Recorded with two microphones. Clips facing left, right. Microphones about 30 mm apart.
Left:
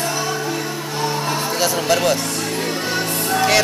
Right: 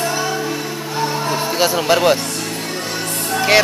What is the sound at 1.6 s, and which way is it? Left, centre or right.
Speech, centre.